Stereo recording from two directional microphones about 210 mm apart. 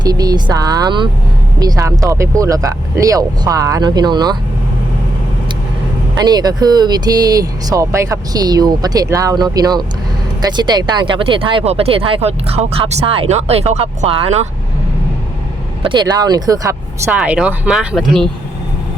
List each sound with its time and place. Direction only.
0.0 s speech: 20° right (ahead or behind)
6.1 s speech: 20° right (ahead or behind)
15.8 s speech: 20° right (ahead or behind)
17.2 s speech: 5° right (ahead or behind)